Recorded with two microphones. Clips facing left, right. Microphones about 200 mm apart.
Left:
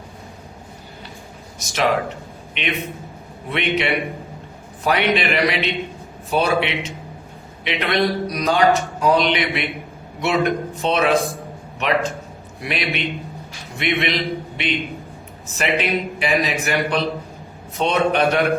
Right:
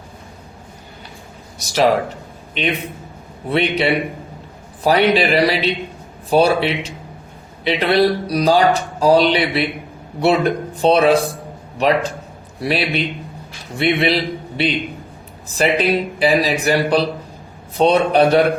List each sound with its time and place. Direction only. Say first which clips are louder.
1.5 s speech: right 5 dB; 35° right (ahead or behind)
3.5 s a man's voice: right 4 dB; 35° right (ahead or behind)